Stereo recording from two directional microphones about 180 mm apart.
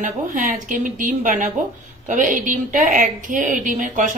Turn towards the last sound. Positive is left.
turn(degrees=-45)  # may be behind; listen again after turning